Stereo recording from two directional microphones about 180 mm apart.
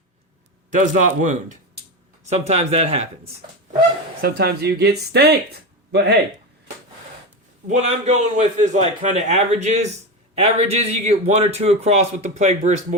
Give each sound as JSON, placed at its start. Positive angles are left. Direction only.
{"t": 0.7, "sound": "a man's voice", "side_deg": -45}
{"t": 4.2, "sound": "speech", "side_deg": -60}
{"t": 7.7, "sound": "a man's voice", "side_deg": -40}